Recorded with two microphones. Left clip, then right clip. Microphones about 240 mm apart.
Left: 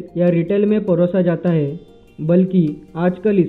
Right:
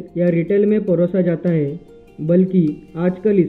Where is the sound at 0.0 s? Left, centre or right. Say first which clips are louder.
Left 1 dB; centre.